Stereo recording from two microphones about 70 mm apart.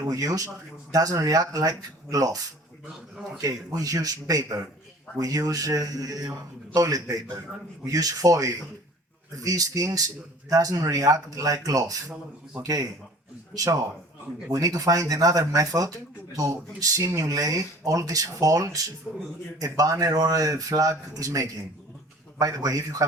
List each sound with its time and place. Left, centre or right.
0.1 s speech: right
14.5 s speech: right
19.1 s a man's voice: centre
19.5 s speech: right